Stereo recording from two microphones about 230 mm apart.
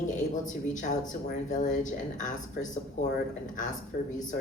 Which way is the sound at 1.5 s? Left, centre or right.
Left.